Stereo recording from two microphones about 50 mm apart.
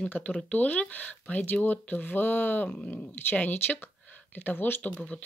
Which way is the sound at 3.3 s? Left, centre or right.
Left.